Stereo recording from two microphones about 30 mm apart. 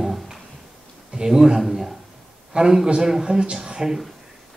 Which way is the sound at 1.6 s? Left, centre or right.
Centre.